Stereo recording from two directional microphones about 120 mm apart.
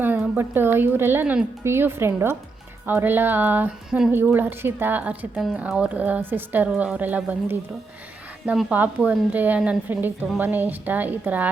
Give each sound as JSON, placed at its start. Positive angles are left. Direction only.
{"t": 0.0, "sound": "a woman's voice", "side_deg": -15}
{"t": 3.8, "sound": "a woman's voice", "side_deg": -5}
{"t": 4.1, "sound": "a woman's voice", "side_deg": -15}
{"t": 8.7, "sound": "a woman's voice", "side_deg": -15}